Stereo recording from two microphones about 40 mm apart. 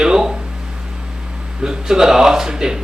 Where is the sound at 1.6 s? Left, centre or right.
Centre.